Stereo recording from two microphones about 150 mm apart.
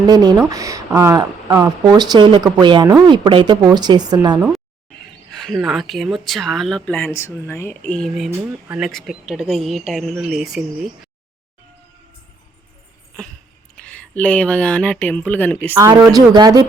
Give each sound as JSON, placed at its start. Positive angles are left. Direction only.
{"t": 0.0, "sound": "speech", "side_deg": -25}
{"t": 5.3, "sound": "speech", "side_deg": 0}
{"t": 7.9, "sound": "speech", "side_deg": 0}
{"t": 8.3, "sound": "speech", "side_deg": -15}
{"t": 8.8, "sound": "speech", "side_deg": 0}
{"t": 13.7, "sound": "speech", "side_deg": 10}
{"t": 15.7, "sound": "speech", "side_deg": -20}